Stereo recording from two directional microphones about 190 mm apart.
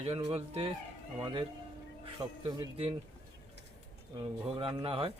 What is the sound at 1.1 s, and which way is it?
Speech, 15° right (ahead or behind).